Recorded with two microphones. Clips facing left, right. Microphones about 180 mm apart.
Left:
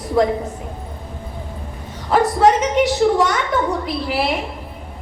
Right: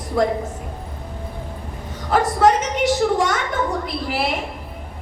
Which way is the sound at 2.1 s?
45° right (ahead or behind).